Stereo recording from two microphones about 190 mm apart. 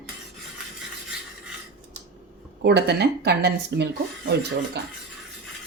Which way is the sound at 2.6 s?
60° right (ahead or behind).